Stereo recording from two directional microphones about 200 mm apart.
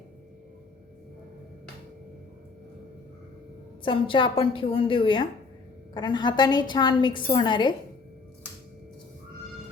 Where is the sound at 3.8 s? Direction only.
25° left (ahead or behind).